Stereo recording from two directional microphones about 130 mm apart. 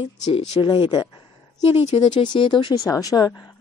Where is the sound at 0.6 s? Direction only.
40° left (ahead or behind).